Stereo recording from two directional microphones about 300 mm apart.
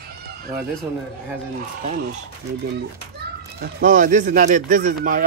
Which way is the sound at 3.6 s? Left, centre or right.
Right.